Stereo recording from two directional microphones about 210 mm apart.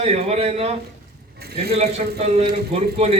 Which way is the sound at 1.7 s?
30° right (ahead or behind).